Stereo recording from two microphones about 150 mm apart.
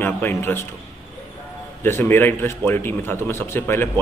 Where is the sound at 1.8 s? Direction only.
15° left (ahead or behind).